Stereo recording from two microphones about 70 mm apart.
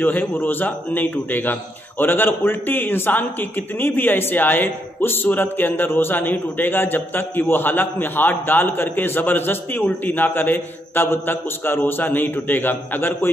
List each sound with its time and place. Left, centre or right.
0.0 s a man's voice: left